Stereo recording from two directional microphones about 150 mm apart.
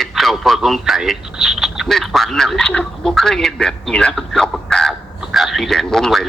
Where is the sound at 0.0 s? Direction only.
Centre (ahead or behind).